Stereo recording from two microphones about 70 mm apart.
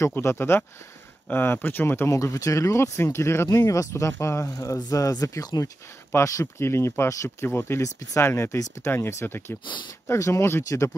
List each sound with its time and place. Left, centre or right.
0.1 s speech: left
2.0 s speech: left
6.1 s speech: left
7.2 s speech: left
10.1 s speech: left